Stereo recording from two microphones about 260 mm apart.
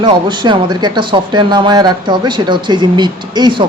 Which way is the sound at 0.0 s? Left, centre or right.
Centre.